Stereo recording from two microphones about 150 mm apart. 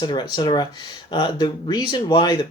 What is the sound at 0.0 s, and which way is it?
Speech, 30° left (ahead or behind).